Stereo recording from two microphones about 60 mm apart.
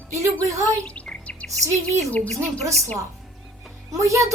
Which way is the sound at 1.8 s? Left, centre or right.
Left.